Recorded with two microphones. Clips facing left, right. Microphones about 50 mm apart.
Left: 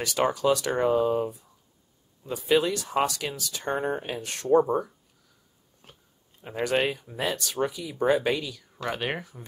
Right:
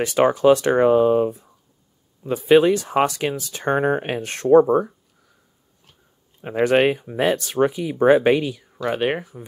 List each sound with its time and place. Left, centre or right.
0.0 s speech: right
6.4 s speech: right
8.8 s speech: right